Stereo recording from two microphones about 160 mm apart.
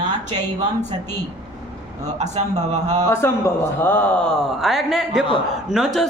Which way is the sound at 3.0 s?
15° left (ahead or behind).